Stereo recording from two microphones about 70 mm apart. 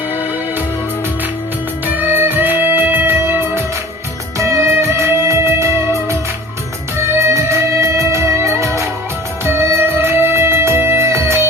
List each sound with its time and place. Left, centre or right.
1.9 s music: right